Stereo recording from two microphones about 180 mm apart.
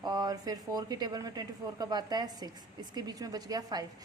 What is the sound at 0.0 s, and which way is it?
A woman's voice, 20° right (ahead or behind).